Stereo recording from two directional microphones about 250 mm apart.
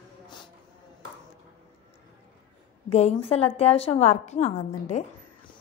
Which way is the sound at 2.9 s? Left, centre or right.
Left.